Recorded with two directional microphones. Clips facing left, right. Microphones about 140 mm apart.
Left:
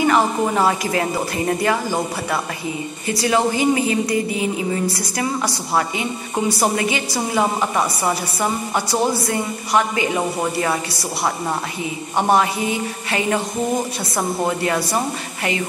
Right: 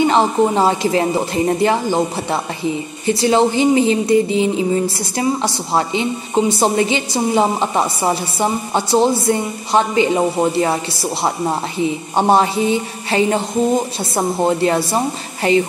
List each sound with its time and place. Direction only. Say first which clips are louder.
0.0 s a woman's voice: right 3 dB; 25° right (ahead or behind)